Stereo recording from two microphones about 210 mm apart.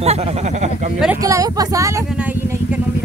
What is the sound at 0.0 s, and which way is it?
Speech, 30° right (ahead or behind).